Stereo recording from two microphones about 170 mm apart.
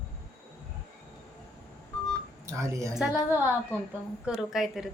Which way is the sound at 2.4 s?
15° right (ahead or behind).